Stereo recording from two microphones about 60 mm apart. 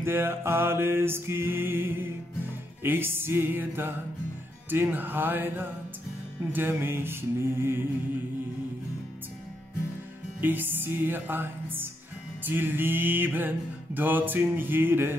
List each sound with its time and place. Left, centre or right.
0.0 s music: right
10.4 s music: right